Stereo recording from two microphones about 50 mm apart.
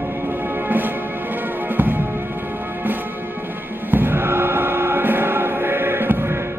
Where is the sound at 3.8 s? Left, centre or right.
Right.